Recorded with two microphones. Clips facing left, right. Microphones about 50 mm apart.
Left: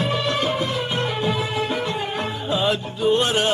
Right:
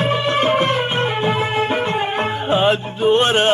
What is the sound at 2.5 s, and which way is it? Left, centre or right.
Music, right.